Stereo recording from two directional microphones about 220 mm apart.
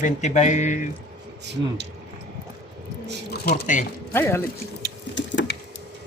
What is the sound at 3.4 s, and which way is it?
Speech, 40° left (ahead or behind).